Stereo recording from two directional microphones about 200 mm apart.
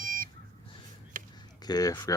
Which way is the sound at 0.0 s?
40° right (ahead or behind).